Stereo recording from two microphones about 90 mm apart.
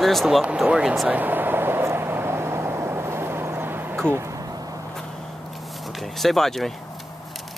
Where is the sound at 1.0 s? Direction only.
20° right (ahead or behind).